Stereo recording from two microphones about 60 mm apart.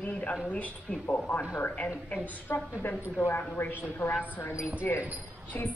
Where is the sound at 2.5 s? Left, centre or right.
Left.